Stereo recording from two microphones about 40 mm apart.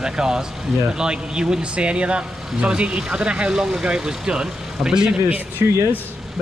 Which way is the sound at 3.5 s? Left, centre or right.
Centre.